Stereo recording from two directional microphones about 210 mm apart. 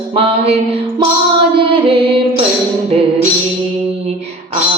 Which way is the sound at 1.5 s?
25° right (ahead or behind).